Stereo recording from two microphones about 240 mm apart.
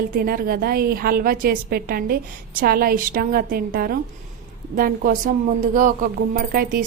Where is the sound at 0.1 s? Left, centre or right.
Right.